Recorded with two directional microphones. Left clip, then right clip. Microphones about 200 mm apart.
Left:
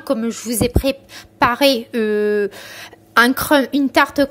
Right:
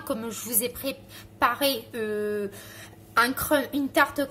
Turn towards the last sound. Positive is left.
turn(degrees=35)  # may be behind; listen again after turning